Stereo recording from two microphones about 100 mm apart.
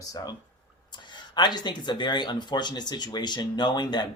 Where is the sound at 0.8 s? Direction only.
50° left (ahead or behind).